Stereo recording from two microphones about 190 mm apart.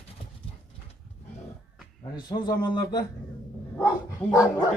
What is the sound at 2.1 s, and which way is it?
Speech, 25° left (ahead or behind).